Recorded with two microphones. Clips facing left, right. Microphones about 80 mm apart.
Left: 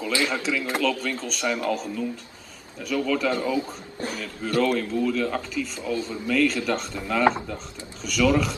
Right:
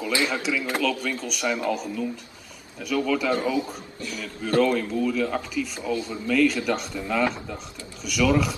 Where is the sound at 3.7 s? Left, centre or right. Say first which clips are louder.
Left 2 dB; left.